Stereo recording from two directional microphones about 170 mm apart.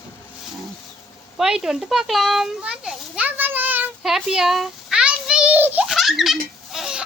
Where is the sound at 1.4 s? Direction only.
5° right (ahead or behind).